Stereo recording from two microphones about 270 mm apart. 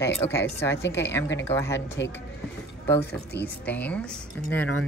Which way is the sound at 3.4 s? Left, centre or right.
Centre.